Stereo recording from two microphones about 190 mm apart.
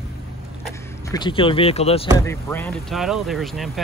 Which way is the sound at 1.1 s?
25° left (ahead or behind).